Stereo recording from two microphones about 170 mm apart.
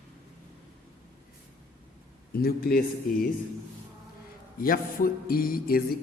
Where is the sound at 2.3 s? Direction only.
60° left (ahead or behind).